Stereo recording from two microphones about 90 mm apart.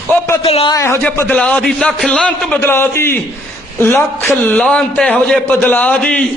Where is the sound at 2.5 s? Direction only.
25° left (ahead or behind).